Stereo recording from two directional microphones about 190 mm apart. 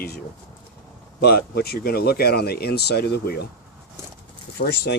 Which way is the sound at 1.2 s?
55° left (ahead or behind).